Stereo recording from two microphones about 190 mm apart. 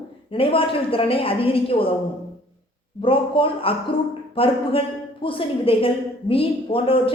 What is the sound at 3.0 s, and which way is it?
A man's voice, 30° left (ahead or behind).